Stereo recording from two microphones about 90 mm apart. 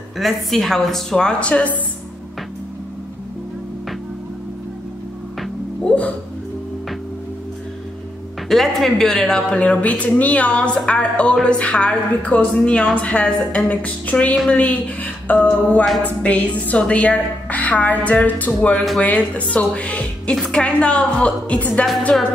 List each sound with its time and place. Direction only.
0.2 s a woman's voice: centre (ahead or behind)
5.9 s music: 15° left (ahead or behind)
8.5 s a woman's voice: 5° left (ahead or behind)